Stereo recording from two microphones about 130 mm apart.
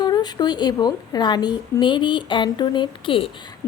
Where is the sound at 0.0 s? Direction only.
30° left (ahead or behind).